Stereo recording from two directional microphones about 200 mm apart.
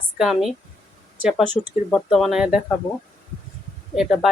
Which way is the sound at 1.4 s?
20° left (ahead or behind).